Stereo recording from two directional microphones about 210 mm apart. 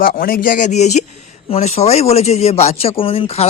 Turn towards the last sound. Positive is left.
turn(degrees=25)  # may be behind; listen again after turning